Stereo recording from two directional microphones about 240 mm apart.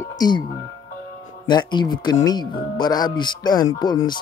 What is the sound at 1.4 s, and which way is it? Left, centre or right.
Speech, centre.